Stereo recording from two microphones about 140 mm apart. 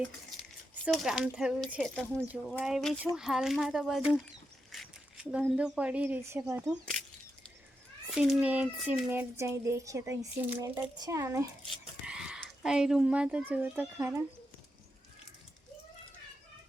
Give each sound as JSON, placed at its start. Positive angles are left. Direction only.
{"t": 0.9, "sound": "a child's voice", "side_deg": 0}
{"t": 4.7, "sound": "a sound", "side_deg": -5}
{"t": 5.5, "sound": "a child's voice", "side_deg": -10}
{"t": 8.1, "sound": "a child's voice", "side_deg": -5}
{"t": 12.0, "sound": "speech", "side_deg": -5}